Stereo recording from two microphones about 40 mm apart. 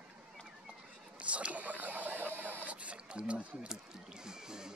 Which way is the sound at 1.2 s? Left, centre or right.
Right.